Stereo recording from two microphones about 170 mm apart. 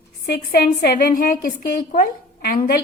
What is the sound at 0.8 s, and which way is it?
A woman's voice, 60° left (ahead or behind).